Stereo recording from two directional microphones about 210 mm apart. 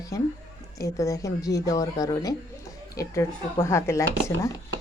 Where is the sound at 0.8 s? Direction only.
15° left (ahead or behind).